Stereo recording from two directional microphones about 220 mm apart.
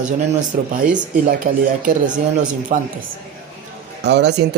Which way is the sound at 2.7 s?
35° right (ahead or behind).